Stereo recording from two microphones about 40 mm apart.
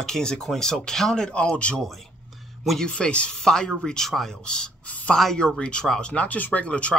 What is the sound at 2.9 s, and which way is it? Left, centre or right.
Speech, left.